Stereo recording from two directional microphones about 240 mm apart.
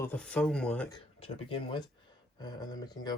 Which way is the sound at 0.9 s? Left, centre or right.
Centre.